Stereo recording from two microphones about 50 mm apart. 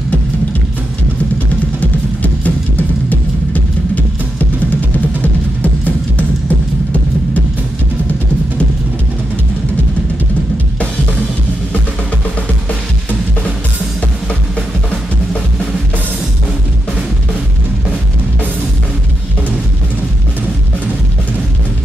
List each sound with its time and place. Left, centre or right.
1.8 s music: left